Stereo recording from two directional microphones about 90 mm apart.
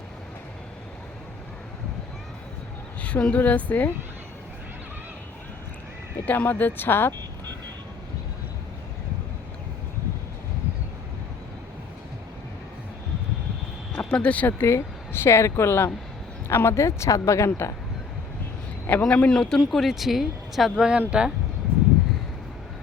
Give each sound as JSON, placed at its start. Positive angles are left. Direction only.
{"t": 3.0, "sound": "a woman's voice", "side_deg": 15}
{"t": 6.2, "sound": "speech", "side_deg": 20}
{"t": 13.9, "sound": "speech", "side_deg": 10}
{"t": 18.9, "sound": "speech", "side_deg": 15}